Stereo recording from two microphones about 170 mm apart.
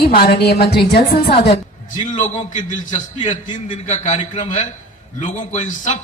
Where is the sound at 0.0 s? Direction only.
65° left (ahead or behind).